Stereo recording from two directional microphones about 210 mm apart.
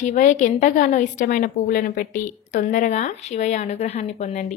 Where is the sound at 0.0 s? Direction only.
35° left (ahead or behind).